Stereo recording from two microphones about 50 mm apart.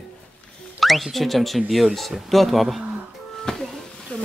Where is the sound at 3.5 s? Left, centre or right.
Centre.